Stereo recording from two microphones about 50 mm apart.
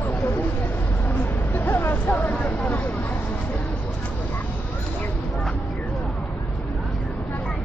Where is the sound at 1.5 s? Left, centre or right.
Left.